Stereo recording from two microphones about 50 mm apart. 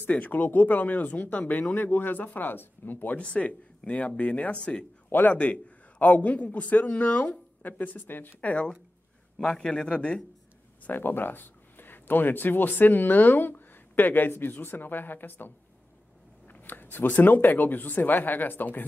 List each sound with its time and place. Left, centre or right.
0.0 s a man's voice: left
3.2 s a man's voice: left
8.5 s speech: left
10.8 s a man's voice: left